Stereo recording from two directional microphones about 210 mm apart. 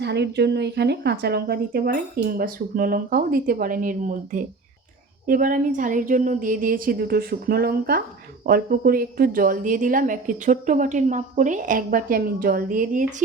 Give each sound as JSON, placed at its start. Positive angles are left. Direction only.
{"t": 0.0, "sound": "a woman's voice", "side_deg": -55}